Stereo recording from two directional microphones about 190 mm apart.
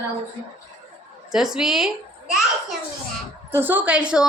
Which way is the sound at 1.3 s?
5° right (ahead or behind).